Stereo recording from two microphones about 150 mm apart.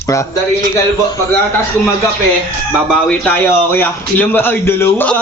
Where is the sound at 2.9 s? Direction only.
10° left (ahead or behind).